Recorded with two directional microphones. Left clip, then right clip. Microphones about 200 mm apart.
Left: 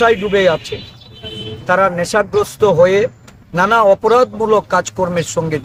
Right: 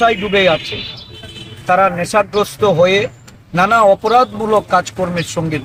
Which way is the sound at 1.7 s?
20° left (ahead or behind).